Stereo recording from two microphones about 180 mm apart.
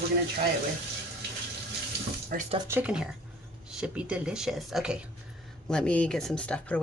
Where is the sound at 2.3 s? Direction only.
55° right (ahead or behind).